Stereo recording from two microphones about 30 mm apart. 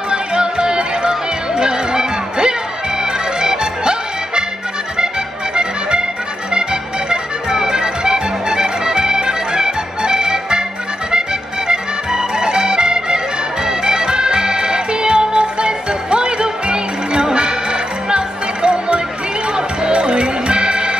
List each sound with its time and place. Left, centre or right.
0.1 s music: right
5.6 s accordion: right
6.5 s music: right